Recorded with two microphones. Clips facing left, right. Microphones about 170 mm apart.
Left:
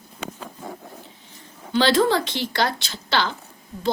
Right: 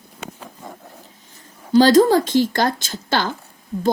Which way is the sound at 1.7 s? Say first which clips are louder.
Right 7 dB; 40° right (ahead or behind).